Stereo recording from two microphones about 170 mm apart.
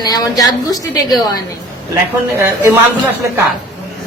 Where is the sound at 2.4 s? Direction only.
15° right (ahead or behind).